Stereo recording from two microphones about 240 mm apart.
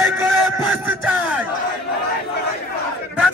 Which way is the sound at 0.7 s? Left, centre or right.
Centre.